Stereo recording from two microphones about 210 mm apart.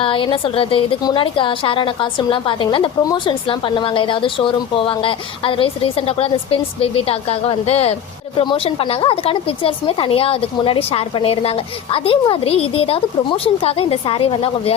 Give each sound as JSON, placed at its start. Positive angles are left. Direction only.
{"t": 0.0, "sound": "a woman's voice", "side_deg": 25}